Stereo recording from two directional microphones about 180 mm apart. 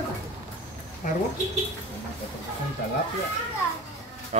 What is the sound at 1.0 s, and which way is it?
Speech, 45° left (ahead or behind).